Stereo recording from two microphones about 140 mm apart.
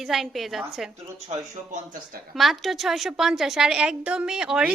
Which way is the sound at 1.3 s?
65° right (ahead or behind).